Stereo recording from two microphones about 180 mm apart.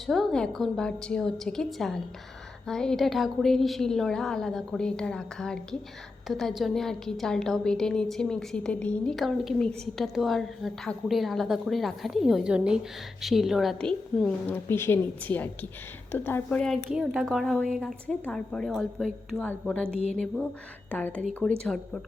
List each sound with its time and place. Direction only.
0.0 s a woman's voice: centre (ahead or behind)